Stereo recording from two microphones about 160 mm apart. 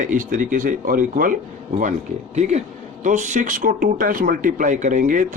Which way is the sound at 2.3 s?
45° right (ahead or behind).